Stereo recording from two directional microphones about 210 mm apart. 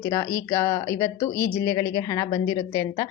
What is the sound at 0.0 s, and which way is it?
Speech, 15° left (ahead or behind).